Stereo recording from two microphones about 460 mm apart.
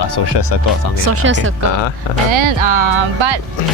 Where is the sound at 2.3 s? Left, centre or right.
Right.